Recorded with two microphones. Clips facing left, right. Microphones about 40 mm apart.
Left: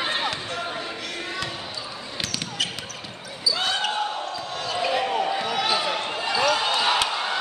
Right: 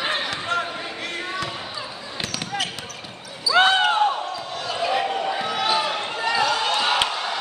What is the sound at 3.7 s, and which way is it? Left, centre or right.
Basketball bounce, right.